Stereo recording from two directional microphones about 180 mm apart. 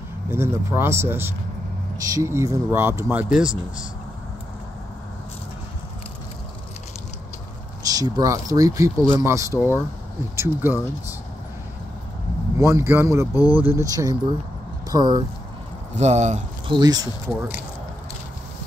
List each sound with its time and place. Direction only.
0.3 s speech: 15° right (ahead or behind)
7.8 s speech: 20° right (ahead or behind)
12.5 s speech: 15° right (ahead or behind)
13.3 s speech: 20° left (ahead or behind)
13.6 s speech: 15° right (ahead or behind)
15.9 s speech: 40° right (ahead or behind)
16.6 s speech: 25° right (ahead or behind)